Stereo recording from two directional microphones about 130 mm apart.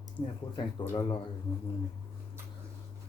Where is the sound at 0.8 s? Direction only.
15° left (ahead or behind).